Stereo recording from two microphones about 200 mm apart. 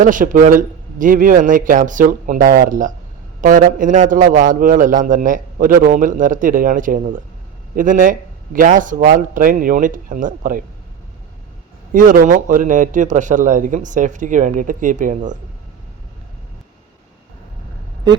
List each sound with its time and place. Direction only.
0.0 s a man's voice: 40° right (ahead or behind)
11.9 s a man's voice: 45° right (ahead or behind)